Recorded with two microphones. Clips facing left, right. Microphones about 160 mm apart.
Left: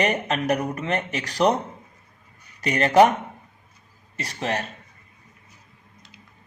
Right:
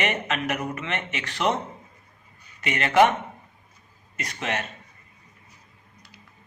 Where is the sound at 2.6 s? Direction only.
40° left (ahead or behind).